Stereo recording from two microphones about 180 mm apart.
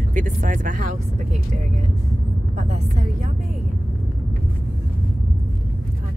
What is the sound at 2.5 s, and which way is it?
Speech, 40° right (ahead or behind).